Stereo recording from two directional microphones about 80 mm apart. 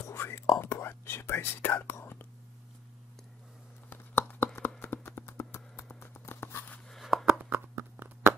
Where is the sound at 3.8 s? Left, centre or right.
Left.